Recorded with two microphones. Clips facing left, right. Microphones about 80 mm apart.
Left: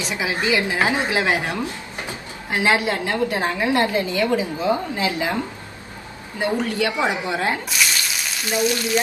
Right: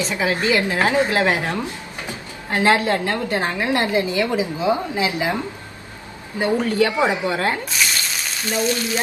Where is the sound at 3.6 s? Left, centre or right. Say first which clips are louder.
Left 1 dB; centre.